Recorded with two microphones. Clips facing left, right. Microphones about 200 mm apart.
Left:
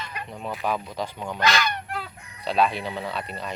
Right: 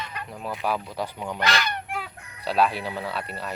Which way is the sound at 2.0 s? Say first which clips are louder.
Even; 10° right (ahead or behind).